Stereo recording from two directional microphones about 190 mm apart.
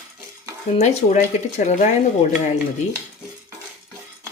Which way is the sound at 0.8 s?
40° left (ahead or behind).